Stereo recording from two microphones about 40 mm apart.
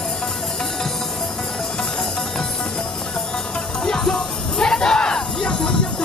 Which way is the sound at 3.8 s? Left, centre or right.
Centre.